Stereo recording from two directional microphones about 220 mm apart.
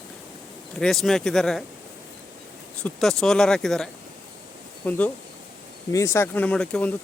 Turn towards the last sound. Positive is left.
turn(degrees=5)  # may be behind; listen again after turning